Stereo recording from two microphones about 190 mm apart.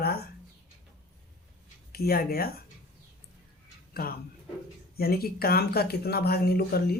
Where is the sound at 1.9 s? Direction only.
55° left (ahead or behind).